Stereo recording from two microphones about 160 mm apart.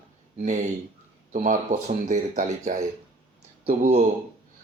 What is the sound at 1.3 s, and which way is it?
A man's voice, 50° right (ahead or behind).